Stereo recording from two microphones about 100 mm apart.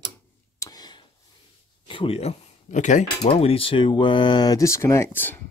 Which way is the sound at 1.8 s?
65° left (ahead or behind).